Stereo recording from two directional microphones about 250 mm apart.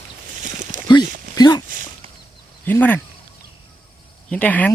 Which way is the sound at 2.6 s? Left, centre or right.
Centre.